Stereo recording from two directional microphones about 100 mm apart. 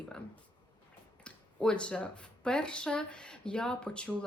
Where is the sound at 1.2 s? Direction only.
10° left (ahead or behind).